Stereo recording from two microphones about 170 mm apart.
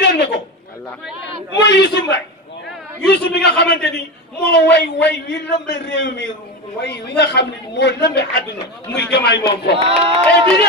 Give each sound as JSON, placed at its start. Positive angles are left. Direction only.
{"t": 0.0, "sound": "a sound", "side_deg": 75}
{"t": 1.6, "sound": "a woman's voice", "side_deg": 90}
{"t": 3.1, "sound": "a woman's voice", "side_deg": 75}
{"t": 6.8, "sound": "a woman's voice", "side_deg": 80}
{"t": 9.8, "sound": "speech", "side_deg": -35}